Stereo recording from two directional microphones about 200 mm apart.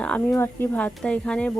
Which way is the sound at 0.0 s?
5° left (ahead or behind).